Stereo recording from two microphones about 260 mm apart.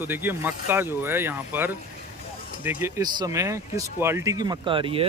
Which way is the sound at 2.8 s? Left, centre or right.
Centre.